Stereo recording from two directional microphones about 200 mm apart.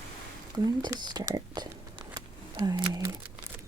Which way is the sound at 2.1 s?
20° right (ahead or behind).